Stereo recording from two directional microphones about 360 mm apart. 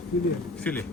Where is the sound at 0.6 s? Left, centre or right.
Centre.